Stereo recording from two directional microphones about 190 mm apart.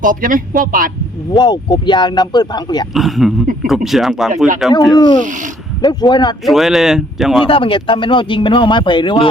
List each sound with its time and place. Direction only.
0.0 s speech: 45° right (ahead or behind)
1.3 s speech: 25° left (ahead or behind)
2.9 s speech: centre (ahead or behind)
4.9 s speech: 25° left (ahead or behind)
6.4 s speech: centre (ahead or behind)
7.4 s speech: 30° left (ahead or behind)